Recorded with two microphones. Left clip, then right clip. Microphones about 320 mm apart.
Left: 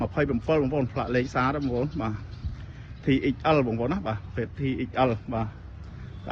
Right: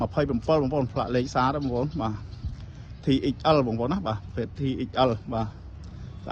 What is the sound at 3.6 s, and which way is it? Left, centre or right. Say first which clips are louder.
Speech: even; right.